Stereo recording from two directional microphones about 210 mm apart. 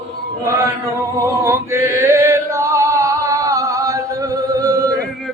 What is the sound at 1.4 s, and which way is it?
Chant, 10° right (ahead or behind).